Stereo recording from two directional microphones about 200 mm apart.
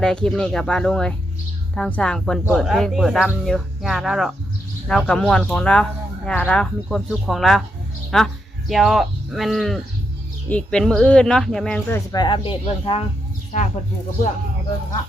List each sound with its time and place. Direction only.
0.0 s speech: 5° left (ahead or behind); by 13.1 s 25° left (ahead or behind)
13.5 s speech: 35° left (ahead or behind)